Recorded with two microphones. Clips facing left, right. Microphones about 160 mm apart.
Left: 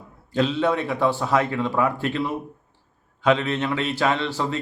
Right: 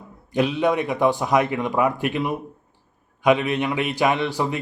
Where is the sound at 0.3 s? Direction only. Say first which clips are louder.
Right 1 dB; 15° right (ahead or behind).